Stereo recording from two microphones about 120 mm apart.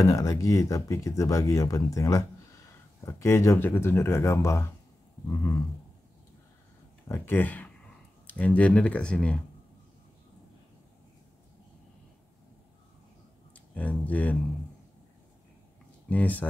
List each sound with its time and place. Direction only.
0.0 s speech: 30° left (ahead or behind)
7.1 s speech: 15° left (ahead or behind)
13.5 s speech: 10° left (ahead or behind)
16.1 s speech: 15° left (ahead or behind)